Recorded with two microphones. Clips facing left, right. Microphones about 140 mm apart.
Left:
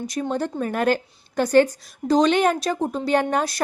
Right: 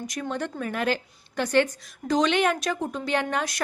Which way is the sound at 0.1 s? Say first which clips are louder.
Left 6 dB; 35° left (ahead or behind).